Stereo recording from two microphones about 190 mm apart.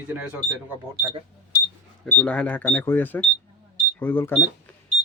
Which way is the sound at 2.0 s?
5° left (ahead or behind).